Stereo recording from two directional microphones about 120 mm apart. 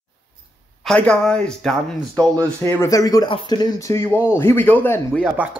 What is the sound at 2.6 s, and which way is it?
Speech, 30° left (ahead or behind).